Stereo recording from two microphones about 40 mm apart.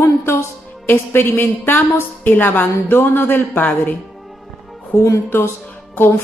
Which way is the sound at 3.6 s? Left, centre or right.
Left.